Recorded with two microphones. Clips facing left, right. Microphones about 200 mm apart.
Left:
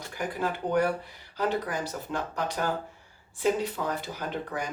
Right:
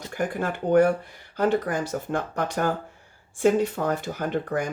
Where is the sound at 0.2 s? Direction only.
50° right (ahead or behind).